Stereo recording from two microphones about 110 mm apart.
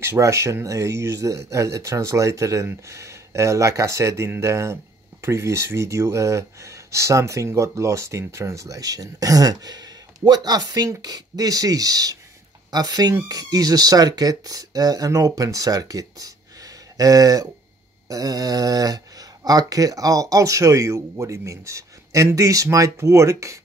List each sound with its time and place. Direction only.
0.0 s speech: 25° right (ahead or behind)